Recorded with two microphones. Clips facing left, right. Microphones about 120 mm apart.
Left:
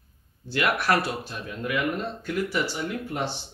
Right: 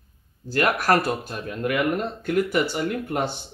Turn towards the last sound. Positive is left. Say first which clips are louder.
# right 4 dB
turn(degrees=-50)  # may be behind; listen again after turning